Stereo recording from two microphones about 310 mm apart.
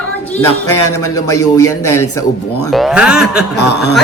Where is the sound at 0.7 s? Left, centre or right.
Left.